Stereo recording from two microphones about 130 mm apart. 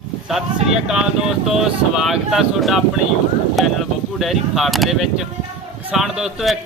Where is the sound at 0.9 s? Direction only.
5° right (ahead or behind).